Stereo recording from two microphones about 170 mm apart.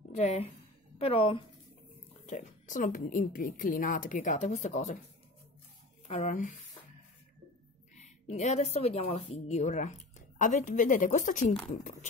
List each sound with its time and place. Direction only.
0.1 s a woman's voice: 40° left (ahead or behind)
2.2 s a woman's voice: 45° left (ahead or behind)
6.0 s a woman's voice: 45° left (ahead or behind)
7.9 s a woman's voice: 45° left (ahead or behind)